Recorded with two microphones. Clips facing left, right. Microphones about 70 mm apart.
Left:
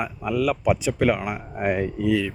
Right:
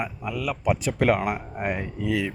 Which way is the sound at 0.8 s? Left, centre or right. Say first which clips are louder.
Even; right.